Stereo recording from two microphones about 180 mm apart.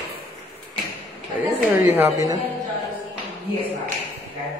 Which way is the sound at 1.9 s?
15° right (ahead or behind).